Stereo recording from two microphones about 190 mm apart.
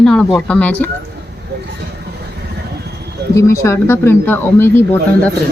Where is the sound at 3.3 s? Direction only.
15° left (ahead or behind).